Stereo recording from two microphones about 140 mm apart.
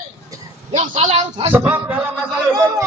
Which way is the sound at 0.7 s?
55° right (ahead or behind).